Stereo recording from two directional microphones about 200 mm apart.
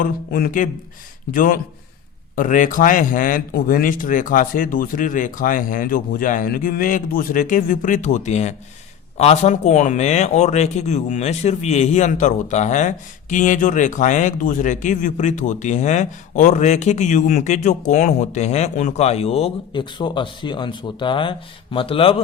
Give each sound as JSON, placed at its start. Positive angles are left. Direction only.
{"t": 0.0, "sound": "speech", "side_deg": 45}